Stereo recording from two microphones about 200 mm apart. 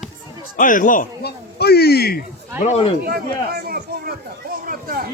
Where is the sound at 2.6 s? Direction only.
30° left (ahead or behind).